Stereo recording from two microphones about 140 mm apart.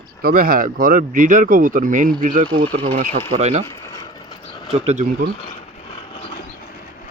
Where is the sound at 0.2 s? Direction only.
90° right; by 2.5 s 70° right (ahead or behind).